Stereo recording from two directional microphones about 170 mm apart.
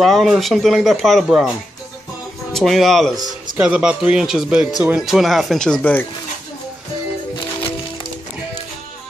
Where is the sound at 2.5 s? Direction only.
Centre (ahead or behind).